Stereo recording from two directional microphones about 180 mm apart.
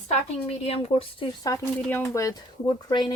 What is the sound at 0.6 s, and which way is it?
Speech, 35° left (ahead or behind).